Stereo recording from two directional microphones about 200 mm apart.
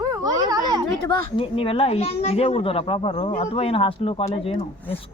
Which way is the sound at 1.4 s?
25° left (ahead or behind).